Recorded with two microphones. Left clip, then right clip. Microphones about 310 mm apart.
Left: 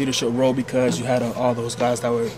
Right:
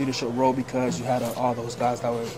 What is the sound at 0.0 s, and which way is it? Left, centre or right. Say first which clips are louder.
A man's voice: left 3 dB; left.